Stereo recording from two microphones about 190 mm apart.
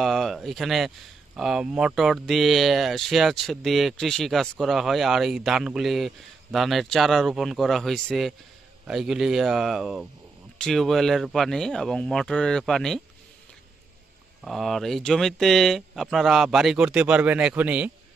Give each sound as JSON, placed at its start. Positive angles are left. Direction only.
{"t": 0.0, "sound": "speech", "side_deg": 0}
{"t": 14.4, "sound": "speech", "side_deg": 0}